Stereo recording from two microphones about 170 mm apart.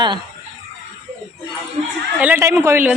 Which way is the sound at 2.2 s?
10° right (ahead or behind).